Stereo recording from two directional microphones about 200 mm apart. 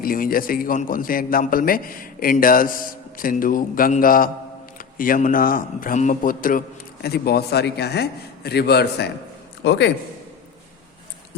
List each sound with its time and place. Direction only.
0.0 s a man's voice: 45° left (ahead or behind); by 9.9 s 60° left (ahead or behind)